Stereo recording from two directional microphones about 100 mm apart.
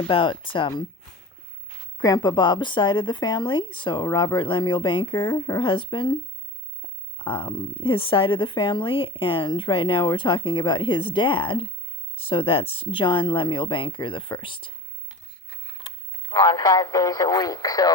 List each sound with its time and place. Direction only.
0.1 s a woman's voice: 60° left (ahead or behind)
2.0 s a woman's voice: 45° left (ahead or behind)
7.2 s a woman's voice: 60° left (ahead or behind)
15.8 s a sound: 60° left (ahead or behind)
16.3 s speech: 45° left (ahead or behind)